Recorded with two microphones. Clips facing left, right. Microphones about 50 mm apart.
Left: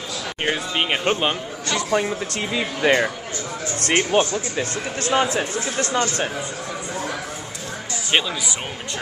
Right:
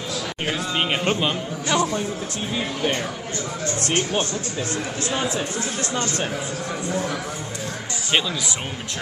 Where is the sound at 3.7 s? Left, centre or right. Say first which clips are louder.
Left 6 dB; left.